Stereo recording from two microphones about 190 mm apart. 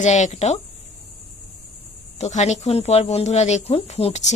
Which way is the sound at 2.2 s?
35° left (ahead or behind).